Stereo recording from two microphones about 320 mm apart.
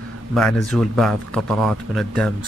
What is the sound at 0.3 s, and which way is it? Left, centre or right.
A man's voice, centre.